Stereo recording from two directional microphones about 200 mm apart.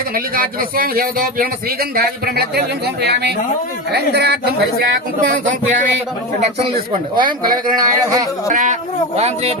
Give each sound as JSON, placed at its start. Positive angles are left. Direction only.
{"t": 0.1, "sound": "speech", "side_deg": -45}
{"t": 6.4, "sound": "a man's voice", "side_deg": -25}
{"t": 8.5, "sound": "speech", "side_deg": -40}